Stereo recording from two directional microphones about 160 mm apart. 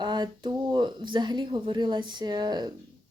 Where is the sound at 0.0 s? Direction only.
30° right (ahead or behind).